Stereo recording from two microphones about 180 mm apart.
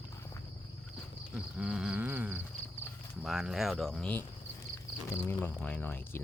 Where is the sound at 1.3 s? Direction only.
5° right (ahead or behind).